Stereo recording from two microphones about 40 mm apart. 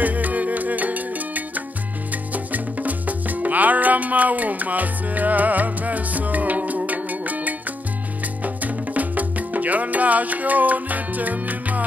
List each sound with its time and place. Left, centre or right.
0.0 s music: right
8.6 s music: right